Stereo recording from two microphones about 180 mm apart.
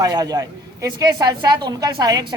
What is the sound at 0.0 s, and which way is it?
Speech, 20° right (ahead or behind).